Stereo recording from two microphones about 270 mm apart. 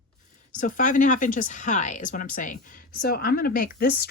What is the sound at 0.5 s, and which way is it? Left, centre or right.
Speech, left.